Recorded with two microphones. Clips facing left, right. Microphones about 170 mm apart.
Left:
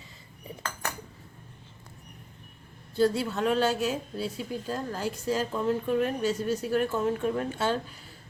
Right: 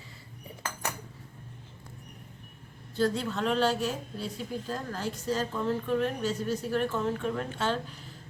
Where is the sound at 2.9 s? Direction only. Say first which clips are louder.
Left 3 dB; 10° left (ahead or behind).